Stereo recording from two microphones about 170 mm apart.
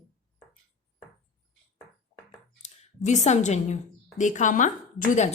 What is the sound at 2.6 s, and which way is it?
A woman's voice, 40° left (ahead or behind).